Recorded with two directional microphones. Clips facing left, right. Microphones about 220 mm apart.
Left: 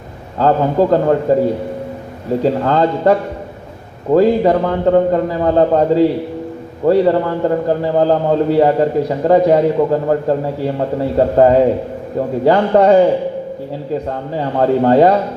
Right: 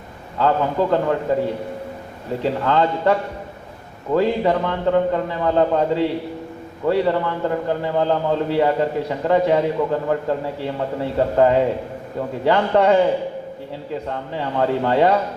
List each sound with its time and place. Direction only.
0.3 s a man's voice: 40° left (ahead or behind)
2.4 s a man's voice: 40° left (ahead or behind)
14.1 s a man's voice: 40° left (ahead or behind)